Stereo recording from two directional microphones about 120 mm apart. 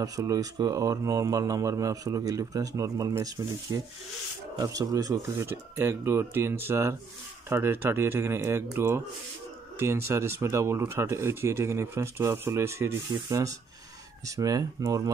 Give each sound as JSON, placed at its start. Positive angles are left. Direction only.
{"t": 0.0, "sound": "speech", "side_deg": -30}